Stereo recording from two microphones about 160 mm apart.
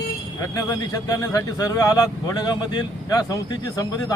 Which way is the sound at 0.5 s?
20° left (ahead or behind).